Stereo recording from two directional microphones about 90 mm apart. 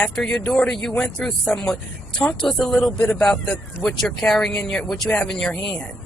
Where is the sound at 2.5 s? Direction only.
Centre (ahead or behind).